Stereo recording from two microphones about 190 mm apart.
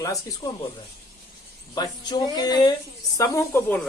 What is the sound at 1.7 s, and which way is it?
A man's voice, 20° left (ahead or behind).